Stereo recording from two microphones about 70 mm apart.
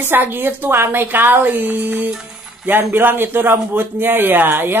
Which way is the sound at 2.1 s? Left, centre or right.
Centre.